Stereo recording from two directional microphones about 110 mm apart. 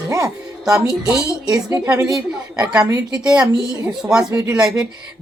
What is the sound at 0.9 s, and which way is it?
Speech, 35° left (ahead or behind).